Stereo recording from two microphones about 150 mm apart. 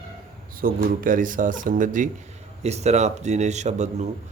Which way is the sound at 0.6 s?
70° right (ahead or behind).